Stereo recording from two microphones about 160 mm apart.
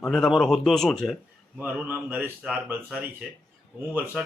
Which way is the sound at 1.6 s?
10° right (ahead or behind).